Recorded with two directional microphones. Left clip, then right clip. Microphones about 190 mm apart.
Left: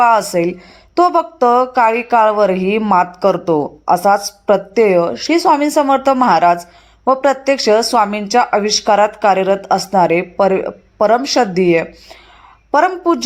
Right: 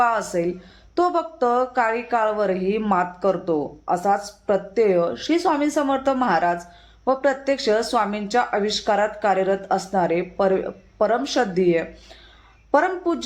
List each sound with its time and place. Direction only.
0.0 s speech: 25° left (ahead or behind)